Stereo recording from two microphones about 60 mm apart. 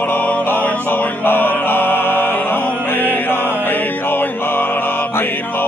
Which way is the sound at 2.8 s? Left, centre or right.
Left.